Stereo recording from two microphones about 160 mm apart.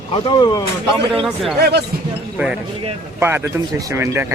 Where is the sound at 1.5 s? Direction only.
90° right.